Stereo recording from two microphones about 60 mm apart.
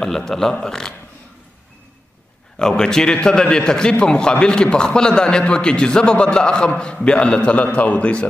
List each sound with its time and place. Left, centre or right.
0.0 s a man's voice: centre
2.6 s a man's voice: centre